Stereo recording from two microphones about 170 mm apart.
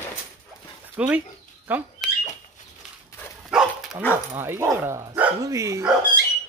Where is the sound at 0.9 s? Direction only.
10° right (ahead or behind).